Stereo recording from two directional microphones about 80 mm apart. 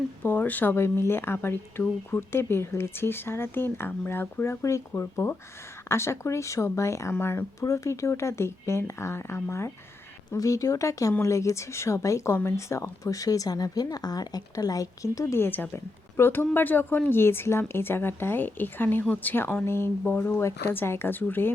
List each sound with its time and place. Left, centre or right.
0.2 s speech: left
4.4 s speech: left
15.4 s speech: left